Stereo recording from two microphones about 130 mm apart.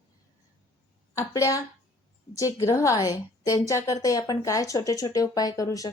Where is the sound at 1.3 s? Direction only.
25° left (ahead or behind).